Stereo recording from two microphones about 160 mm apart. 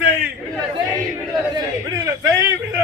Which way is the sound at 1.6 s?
25° right (ahead or behind).